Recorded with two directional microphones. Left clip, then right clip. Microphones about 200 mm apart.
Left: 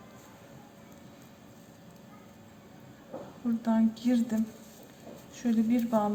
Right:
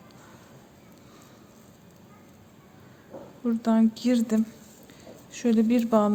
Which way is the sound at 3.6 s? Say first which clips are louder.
Right 5 dB; 55° right (ahead or behind).